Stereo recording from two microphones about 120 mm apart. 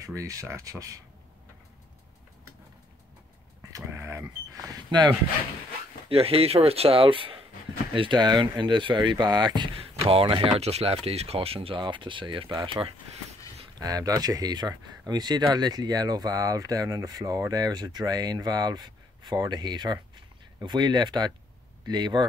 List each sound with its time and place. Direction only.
0.0 s speech: 30° right (ahead or behind)
3.7 s a sound: 25° right (ahead or behind)
6.0 s speech: 55° right (ahead or behind); by 9.7 s 35° right (ahead or behind)
10.0 s speech: 50° right (ahead or behind)